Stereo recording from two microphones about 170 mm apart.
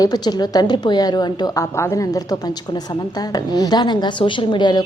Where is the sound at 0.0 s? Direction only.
25° left (ahead or behind).